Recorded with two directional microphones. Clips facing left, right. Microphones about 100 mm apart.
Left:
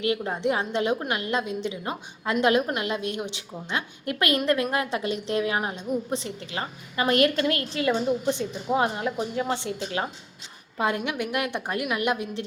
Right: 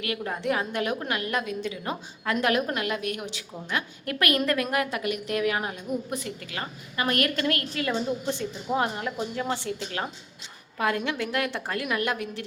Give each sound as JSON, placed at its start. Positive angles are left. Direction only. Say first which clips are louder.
{"t": 0.0, "sound": "a woman's voice", "louder": "left 4 dB", "side_deg": 25}